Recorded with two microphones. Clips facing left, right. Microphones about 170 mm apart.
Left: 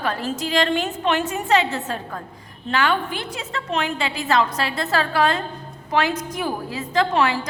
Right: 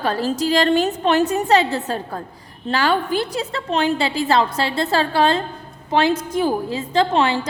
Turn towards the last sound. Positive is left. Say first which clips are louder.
# right 2 dB
turn(degrees=-30)  # may be behind; listen again after turning